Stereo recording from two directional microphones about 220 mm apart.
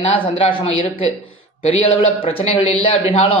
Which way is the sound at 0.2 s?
25° left (ahead or behind).